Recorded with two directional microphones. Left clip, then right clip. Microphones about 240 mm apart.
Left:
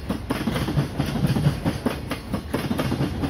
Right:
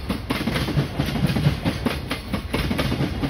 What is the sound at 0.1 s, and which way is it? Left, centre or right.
Train, right.